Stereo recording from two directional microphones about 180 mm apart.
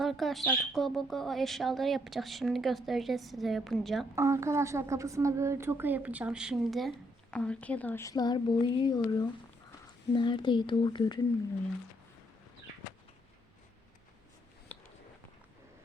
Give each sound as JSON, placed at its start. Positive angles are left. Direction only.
{"t": 0.0, "sound": "a woman's voice", "side_deg": 0}
{"t": 4.1, "sound": "a woman's voice", "side_deg": -15}
{"t": 14.7, "sound": "a sound", "side_deg": 10}